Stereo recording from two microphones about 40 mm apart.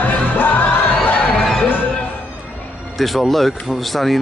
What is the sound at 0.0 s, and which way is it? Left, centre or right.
Music, left.